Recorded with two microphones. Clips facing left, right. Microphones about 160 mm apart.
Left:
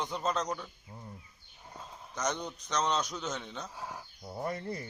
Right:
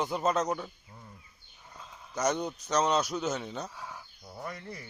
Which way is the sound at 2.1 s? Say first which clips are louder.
Right 5 dB; 10° right (ahead or behind).